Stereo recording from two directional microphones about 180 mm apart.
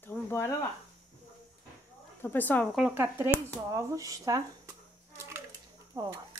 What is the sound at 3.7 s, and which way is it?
Speech, 15° right (ahead or behind).